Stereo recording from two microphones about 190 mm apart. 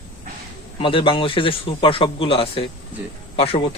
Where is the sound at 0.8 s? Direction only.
25° left (ahead or behind).